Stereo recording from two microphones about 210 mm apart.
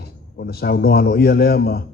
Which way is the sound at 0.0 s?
50° left (ahead or behind).